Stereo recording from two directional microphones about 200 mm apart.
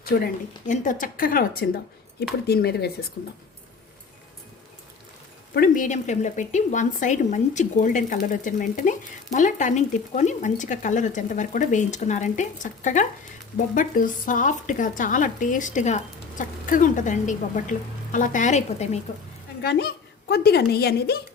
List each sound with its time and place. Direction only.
0.0 s a woman's voice: 50° left (ahead or behind)
5.5 s speech: 40° left (ahead or behind)
19.6 s a woman's voice: 50° left (ahead or behind)